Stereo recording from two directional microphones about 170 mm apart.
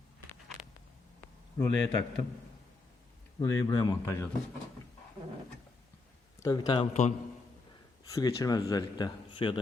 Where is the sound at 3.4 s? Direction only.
20° left (ahead or behind).